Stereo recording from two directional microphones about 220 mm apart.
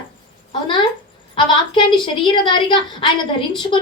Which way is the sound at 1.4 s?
20° left (ahead or behind).